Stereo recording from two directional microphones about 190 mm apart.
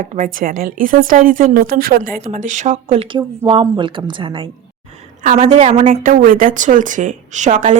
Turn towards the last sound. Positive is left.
turn(degrees=-40)  # may be behind; listen again after turning